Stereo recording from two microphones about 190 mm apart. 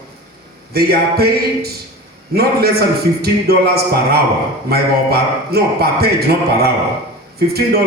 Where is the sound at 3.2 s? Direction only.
55° right (ahead or behind).